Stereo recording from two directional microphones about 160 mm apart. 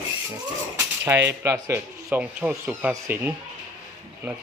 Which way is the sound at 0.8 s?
15° right (ahead or behind).